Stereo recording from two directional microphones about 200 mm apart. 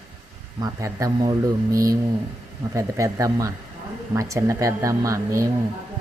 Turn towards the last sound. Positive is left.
turn(degrees=-15)  # may be behind; listen again after turning